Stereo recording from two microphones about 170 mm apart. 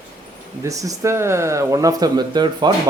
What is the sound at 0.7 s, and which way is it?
Speech, 20° right (ahead or behind).